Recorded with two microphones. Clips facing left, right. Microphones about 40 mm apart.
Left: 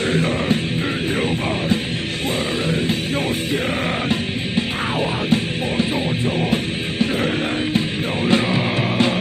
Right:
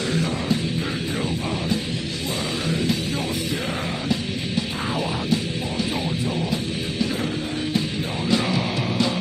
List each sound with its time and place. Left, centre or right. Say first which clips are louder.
0.0 s music: left 5 dB; left
4.1 s music: left 3 dB; left
8.3 s music: left 4 dB; left